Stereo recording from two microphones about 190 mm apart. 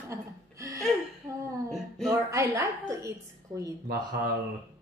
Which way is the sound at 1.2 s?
15° right (ahead or behind).